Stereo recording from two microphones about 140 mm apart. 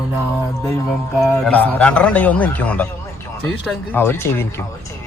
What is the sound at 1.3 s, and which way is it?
A man's voice, 10° left (ahead or behind).